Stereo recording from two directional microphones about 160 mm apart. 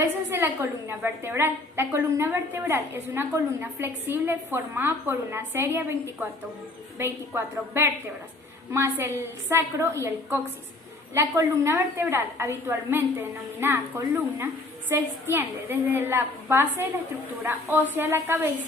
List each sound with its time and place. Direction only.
0.0 s a woman's voice: 15° right (ahead or behind)
7.0 s a woman's voice: 15° right (ahead or behind)